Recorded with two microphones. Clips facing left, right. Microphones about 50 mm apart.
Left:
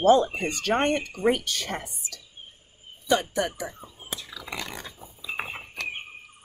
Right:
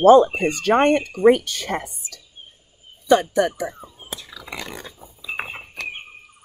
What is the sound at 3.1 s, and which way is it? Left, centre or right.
Speech, right.